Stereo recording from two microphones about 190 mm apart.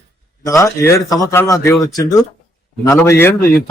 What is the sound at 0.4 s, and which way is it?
A man's voice, 15° left (ahead or behind).